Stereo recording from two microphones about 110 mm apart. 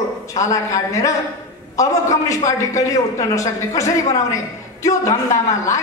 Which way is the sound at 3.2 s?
30° left (ahead or behind).